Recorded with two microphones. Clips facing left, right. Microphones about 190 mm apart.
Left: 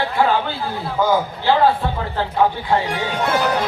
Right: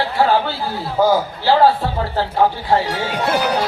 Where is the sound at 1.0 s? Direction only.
40° right (ahead or behind).